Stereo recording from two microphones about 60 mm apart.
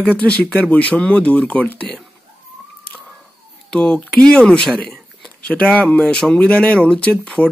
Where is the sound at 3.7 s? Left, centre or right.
Centre.